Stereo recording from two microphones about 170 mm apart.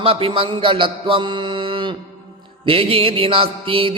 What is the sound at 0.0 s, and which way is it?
A man's voice, 35° right (ahead or behind).